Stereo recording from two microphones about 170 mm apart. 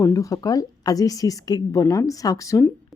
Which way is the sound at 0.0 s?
20° left (ahead or behind).